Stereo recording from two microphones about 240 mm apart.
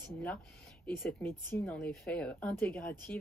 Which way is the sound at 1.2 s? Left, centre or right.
Centre.